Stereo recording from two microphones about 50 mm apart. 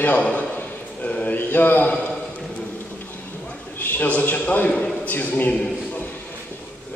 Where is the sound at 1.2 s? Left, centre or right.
Left.